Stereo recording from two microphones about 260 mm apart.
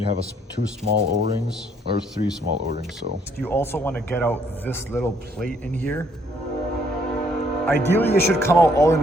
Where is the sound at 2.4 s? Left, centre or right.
Right.